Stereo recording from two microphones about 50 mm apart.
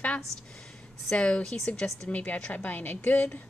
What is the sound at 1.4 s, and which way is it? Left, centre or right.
Speech, centre.